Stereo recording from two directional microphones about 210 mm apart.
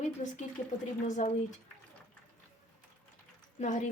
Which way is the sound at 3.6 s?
35° left (ahead or behind).